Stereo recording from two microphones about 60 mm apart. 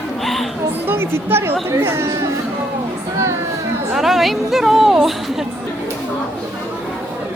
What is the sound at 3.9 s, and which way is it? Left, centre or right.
A woman's voice, centre.